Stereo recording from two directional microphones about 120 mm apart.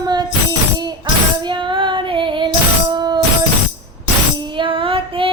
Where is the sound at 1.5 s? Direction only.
40° right (ahead or behind).